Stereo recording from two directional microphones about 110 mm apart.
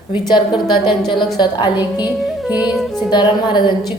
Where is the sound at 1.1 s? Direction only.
45° left (ahead or behind).